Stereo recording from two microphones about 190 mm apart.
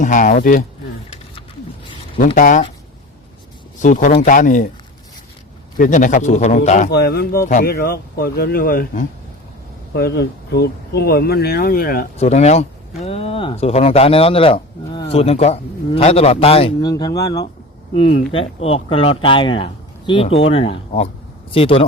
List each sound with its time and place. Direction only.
0.0 s speech: 40° left (ahead or behind)
2.1 s speech: 45° left (ahead or behind)
3.8 s speech: 40° left (ahead or behind)
5.7 s a man's voice: 45° left (ahead or behind)
6.9 s speech: 55° left (ahead or behind)
12.1 s speech: 35° left (ahead or behind)
16.9 s a man's voice: 20° left (ahead or behind)